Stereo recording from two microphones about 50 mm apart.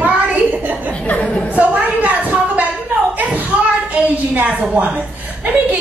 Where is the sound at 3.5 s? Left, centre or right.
Right.